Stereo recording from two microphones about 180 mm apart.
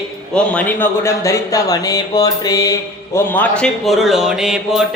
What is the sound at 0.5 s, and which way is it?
Speech, 15° left (ahead or behind).